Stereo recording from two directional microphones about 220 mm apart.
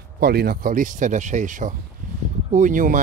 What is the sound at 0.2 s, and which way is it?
Speech, 45° right (ahead or behind).